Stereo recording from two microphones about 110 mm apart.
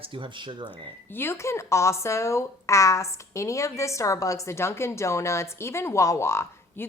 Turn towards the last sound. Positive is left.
turn(degrees=25)  # may be behind; listen again after turning